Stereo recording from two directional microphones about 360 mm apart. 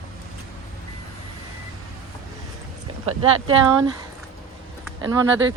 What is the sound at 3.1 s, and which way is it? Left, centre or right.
Speech, centre.